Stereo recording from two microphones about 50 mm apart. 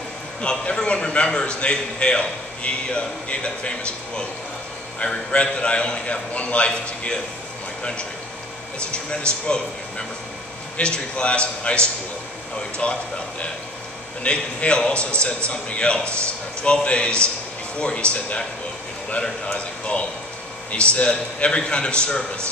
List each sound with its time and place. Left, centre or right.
0.4 s a man's voice: centre
8.9 s a man's voice: centre
14.2 s a man's voice: left
19.2 s a man's voice: left